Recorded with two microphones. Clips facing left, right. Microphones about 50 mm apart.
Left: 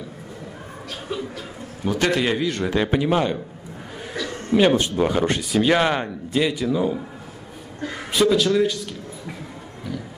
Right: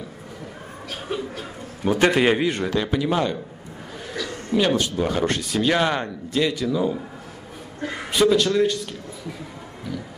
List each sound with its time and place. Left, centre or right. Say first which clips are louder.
1.0 s speech: right 1 dB; right
1.9 s a man's voice: right 3 dB; right
2.7 s speech: left 2 dB; left
4.2 s a sound: left 3 dB; left
4.6 s speech: left 3 dB; left
5.1 s speech: left 2 dB; centre
7.8 s a woman's voice: right 1 dB; right
8.1 s speech: even; centre